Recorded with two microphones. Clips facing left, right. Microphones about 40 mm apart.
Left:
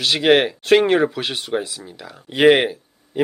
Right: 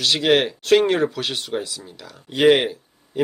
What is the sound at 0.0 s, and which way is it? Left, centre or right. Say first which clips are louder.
Speech: left 3 dB; centre.